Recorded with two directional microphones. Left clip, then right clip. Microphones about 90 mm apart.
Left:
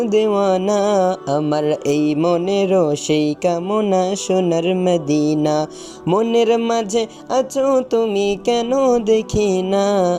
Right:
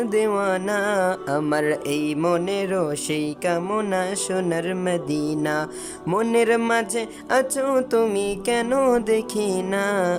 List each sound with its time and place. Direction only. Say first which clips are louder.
0.0 s a sound: left 5 dB; 15° left (ahead or behind)
0.3 s music: left 6 dB; 30° left (ahead or behind)
1.3 s music: left 4 dB; 15° left (ahead or behind)
1.9 s music: left 6 dB; 40° left (ahead or behind)
3.7 s music: left 6 dB; 25° left (ahead or behind)
7.5 s music: left 5 dB; 20° left (ahead or behind)
8.7 s music: left 4 dB; 20° left (ahead or behind)